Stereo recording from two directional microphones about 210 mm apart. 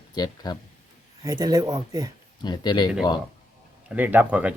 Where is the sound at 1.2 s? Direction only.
15° right (ahead or behind).